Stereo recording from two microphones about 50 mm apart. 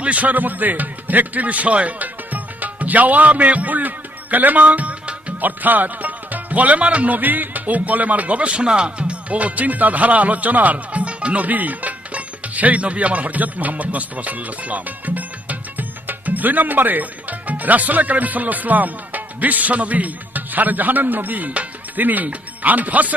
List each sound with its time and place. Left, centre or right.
0.0 s speech: right